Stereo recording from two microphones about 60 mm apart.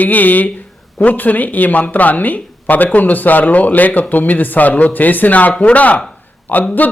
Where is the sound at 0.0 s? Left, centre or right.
Left.